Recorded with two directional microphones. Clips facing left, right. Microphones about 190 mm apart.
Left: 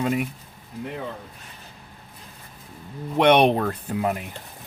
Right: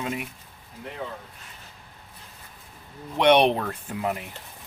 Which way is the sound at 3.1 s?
50° left (ahead or behind).